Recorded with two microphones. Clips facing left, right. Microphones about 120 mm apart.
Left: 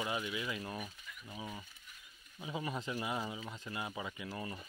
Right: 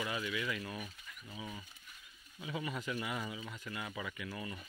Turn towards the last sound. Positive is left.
turn(degrees=30)  # may be behind; listen again after turning